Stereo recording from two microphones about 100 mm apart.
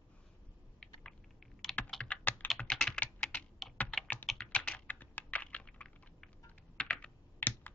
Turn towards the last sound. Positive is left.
turn(degrees=20)  # may be behind; listen again after turning